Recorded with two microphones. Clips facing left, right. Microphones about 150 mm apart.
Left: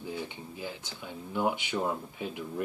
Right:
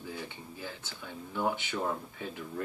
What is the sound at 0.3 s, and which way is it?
Speech, 15° left (ahead or behind).